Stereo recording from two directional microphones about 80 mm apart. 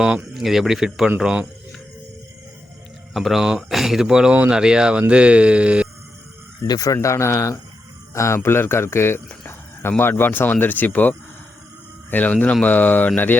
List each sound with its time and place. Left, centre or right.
0.3 s speech: centre
3.1 s speech: centre
6.7 s speech: left
12.1 s speech: centre